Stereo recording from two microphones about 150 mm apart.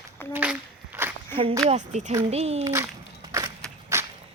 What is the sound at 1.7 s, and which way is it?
Speech, 50° right (ahead or behind).